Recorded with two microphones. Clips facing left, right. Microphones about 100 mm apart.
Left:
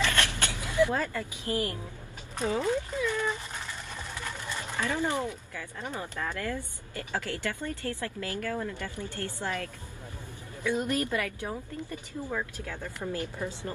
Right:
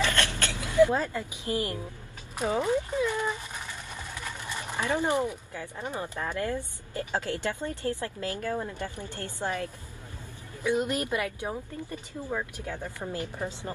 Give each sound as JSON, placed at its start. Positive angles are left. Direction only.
{"t": 0.1, "sound": "vehicle", "side_deg": 15}
{"t": 0.7, "sound": "speech", "side_deg": -20}
{"t": 4.2, "sound": "a sound", "side_deg": -15}
{"t": 5.6, "sound": "speech", "side_deg": -20}